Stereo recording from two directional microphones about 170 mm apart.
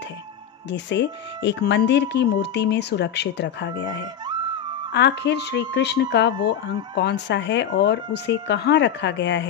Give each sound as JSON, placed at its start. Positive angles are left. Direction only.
{"t": 0.7, "sound": "speech", "side_deg": 90}